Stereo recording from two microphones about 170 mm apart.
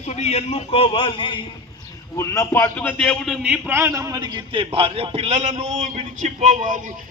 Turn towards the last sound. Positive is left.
turn(degrees=-50)  # may be behind; listen again after turning